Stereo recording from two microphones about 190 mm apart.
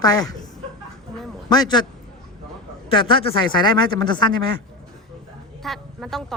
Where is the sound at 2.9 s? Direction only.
25° left (ahead or behind).